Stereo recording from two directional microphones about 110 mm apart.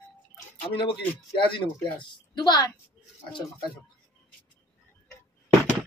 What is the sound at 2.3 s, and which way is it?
Speech, 40° left (ahead or behind).